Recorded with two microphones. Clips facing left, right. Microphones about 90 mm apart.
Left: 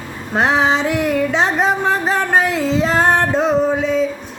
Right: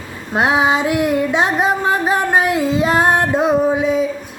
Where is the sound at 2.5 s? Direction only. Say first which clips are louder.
Right 1 dB; 10° right (ahead or behind).